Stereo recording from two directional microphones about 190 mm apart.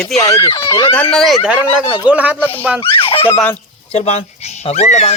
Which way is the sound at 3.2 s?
10° left (ahead or behind).